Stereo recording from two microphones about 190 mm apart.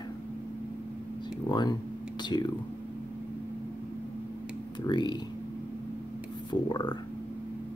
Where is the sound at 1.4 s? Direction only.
25° left (ahead or behind).